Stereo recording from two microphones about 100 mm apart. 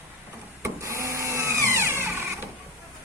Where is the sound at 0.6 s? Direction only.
30° right (ahead or behind).